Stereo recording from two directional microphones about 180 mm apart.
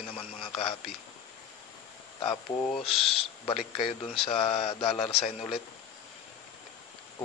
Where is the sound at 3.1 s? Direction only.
35° left (ahead or behind).